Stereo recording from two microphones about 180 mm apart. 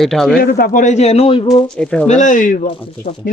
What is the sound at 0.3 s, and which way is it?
A man's voice, 55° left (ahead or behind).